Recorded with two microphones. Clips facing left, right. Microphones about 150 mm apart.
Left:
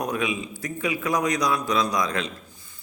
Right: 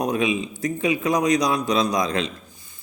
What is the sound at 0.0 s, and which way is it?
A man's voice, 20° right (ahead or behind).